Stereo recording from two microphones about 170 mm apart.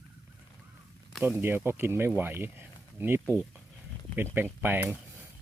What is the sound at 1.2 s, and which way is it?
Speech, 15° right (ahead or behind).